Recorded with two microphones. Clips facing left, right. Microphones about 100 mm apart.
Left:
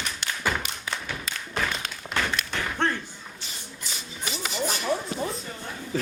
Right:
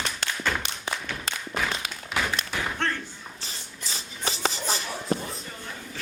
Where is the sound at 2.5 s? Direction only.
10° right (ahead or behind).